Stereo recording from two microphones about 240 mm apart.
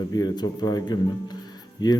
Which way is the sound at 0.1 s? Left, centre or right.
Centre.